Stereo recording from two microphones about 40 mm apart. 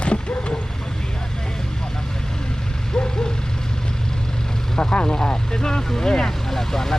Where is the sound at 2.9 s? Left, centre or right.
Centre.